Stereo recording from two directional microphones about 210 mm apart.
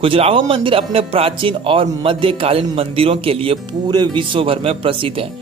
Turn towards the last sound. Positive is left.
turn(degrees=-25)  # may be behind; listen again after turning